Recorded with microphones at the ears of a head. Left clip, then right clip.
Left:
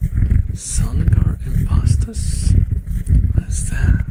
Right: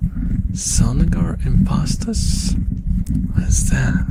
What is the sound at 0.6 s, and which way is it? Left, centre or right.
Speech, right.